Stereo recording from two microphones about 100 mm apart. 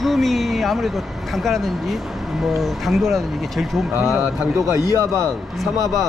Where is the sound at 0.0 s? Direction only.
Centre (ahead or behind).